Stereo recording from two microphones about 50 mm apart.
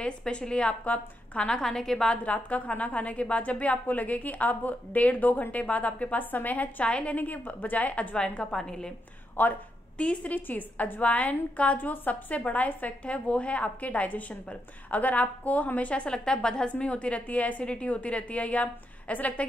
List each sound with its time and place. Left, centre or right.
0.0 s a woman's voice: centre
1.6 s a woman's voice: centre
2.2 s a woman's voice: left; by 8.9 s centre
9.4 s a woman's voice: left
9.9 s a woman's voice: left